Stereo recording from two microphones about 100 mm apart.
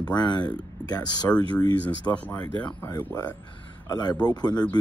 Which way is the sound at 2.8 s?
30° left (ahead or behind).